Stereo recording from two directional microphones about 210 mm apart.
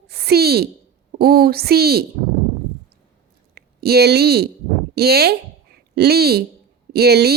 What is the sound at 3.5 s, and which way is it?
A child's voice, 50° right (ahead or behind).